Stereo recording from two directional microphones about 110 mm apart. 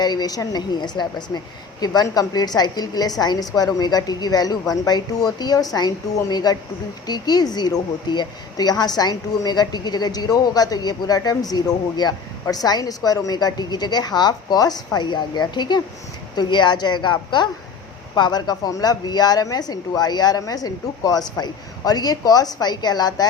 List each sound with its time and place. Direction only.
0.0 s a woman's voice: 40° left (ahead or behind)